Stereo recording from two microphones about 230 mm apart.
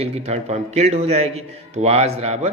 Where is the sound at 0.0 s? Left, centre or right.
Right.